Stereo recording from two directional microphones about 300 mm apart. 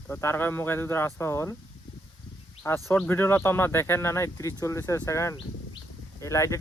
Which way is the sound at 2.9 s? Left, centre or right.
Centre.